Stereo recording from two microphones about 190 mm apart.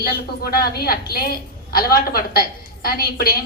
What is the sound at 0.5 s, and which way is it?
A woman's voice, 50° left (ahead or behind).